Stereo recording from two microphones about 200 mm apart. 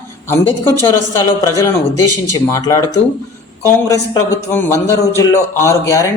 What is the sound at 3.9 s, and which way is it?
A man's voice, 15° left (ahead or behind).